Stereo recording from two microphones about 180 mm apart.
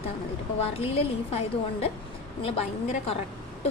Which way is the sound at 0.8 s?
35° left (ahead or behind).